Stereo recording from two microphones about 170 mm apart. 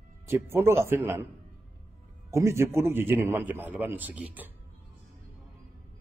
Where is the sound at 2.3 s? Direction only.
15° right (ahead or behind).